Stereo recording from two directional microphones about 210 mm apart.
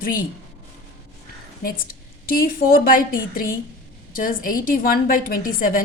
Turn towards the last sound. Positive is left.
turn(degrees=45)  # may be behind; listen again after turning